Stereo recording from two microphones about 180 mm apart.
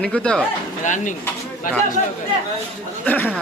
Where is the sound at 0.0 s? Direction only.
5° left (ahead or behind).